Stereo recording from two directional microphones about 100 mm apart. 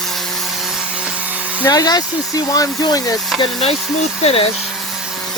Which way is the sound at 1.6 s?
40° left (ahead or behind).